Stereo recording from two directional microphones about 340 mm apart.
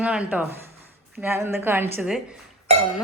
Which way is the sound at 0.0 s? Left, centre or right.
Centre.